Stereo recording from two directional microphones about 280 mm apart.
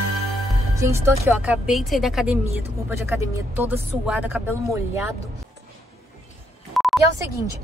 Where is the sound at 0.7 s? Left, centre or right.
Centre.